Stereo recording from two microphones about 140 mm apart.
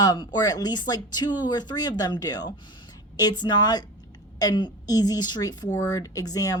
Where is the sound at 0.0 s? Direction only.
30° left (ahead or behind).